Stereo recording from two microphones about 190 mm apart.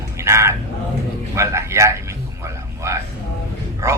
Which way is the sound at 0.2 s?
15° right (ahead or behind).